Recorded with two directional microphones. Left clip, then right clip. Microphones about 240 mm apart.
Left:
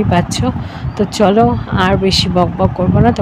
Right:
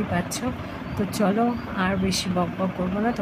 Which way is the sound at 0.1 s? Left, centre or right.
Left.